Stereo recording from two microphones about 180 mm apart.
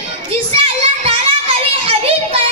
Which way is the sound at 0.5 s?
30° right (ahead or behind).